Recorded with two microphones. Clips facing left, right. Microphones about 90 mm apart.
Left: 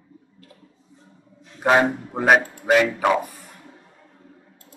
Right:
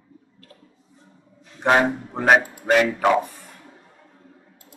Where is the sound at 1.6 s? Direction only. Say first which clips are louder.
Left 1 dB; centre (ahead or behind).